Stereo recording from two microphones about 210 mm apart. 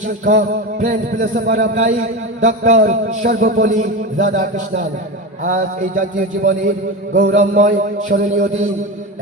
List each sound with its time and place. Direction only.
0.3 s speech: 35° right (ahead or behind)